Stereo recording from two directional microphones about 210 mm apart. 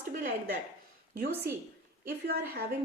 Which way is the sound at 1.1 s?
45° right (ahead or behind).